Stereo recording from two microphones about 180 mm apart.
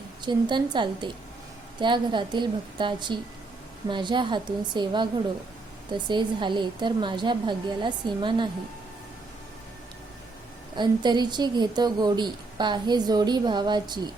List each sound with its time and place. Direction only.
0.2 s a woman's voice: 25° right (ahead or behind)
10.8 s a woman's voice: 25° right (ahead or behind)